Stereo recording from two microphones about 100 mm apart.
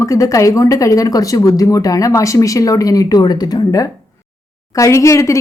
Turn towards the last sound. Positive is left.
turn(degrees=30)  # may be behind; listen again after turning